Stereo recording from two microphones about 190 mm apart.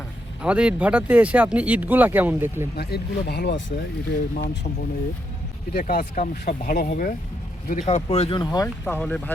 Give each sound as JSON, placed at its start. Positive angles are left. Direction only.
{"t": 0.4, "sound": "speech", "side_deg": -5}
{"t": 2.7, "sound": "speech", "side_deg": 60}
{"t": 5.7, "sound": "speech", "side_deg": 50}